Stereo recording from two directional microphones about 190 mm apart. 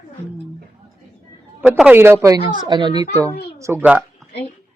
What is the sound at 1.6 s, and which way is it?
Speech, 10° right (ahead or behind).